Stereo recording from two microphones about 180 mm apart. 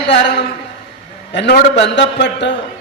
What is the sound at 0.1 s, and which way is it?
A man's voice, 75° left (ahead or behind).